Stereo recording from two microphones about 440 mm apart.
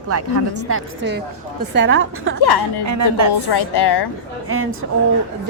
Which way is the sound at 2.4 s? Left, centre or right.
Left.